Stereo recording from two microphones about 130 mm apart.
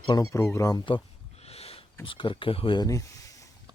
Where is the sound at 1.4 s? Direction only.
50° left (ahead or behind).